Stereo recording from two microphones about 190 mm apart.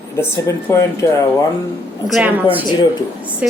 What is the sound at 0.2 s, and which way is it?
Speech, 15° left (ahead or behind).